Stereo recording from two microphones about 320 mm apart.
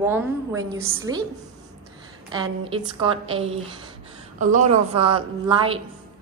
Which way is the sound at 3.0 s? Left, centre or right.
Centre.